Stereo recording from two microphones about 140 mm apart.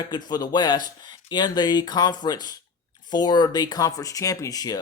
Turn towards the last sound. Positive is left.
turn(degrees=25)  # may be behind; listen again after turning